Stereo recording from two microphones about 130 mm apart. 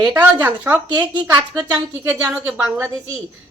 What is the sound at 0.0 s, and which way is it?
A woman's voice, 15° right (ahead or behind).